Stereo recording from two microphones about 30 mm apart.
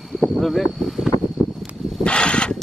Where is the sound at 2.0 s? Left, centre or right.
Left.